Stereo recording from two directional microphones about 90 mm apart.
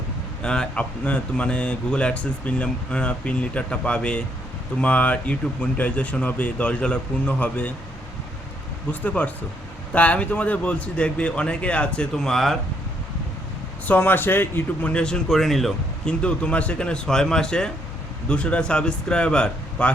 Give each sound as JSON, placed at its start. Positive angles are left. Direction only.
{"t": 0.4, "sound": "speech", "side_deg": 10}
{"t": 8.9, "sound": "speech", "side_deg": 15}
{"t": 13.8, "sound": "speech", "side_deg": 20}
{"t": 16.2, "sound": "speech", "side_deg": 15}